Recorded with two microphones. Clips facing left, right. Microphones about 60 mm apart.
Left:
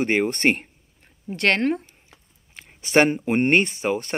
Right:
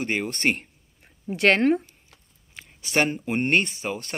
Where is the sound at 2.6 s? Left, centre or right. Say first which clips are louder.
Left 6 dB; left.